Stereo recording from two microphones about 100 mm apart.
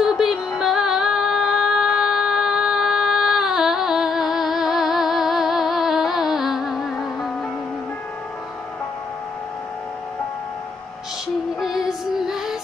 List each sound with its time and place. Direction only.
0.0 s music: 5° right (ahead or behind)
11.6 s music: 5° right (ahead or behind)